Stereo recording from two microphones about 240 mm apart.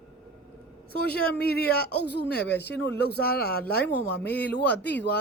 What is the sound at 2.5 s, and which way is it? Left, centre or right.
Speech, left.